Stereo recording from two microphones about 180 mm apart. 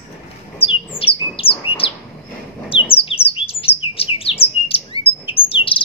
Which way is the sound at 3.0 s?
30° left (ahead or behind).